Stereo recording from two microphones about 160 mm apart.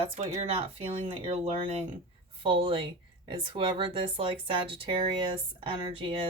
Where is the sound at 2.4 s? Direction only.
35° right (ahead or behind).